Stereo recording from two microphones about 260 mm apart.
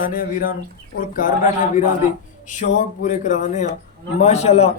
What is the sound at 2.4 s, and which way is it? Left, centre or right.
Speech, left.